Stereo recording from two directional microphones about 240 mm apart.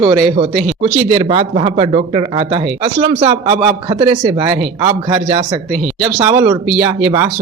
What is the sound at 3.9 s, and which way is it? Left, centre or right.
Speech, centre.